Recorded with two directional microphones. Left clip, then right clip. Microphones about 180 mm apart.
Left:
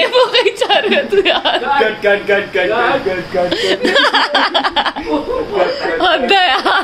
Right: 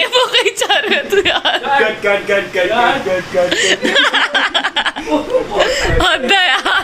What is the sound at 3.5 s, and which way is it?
Speech, 20° left (ahead or behind).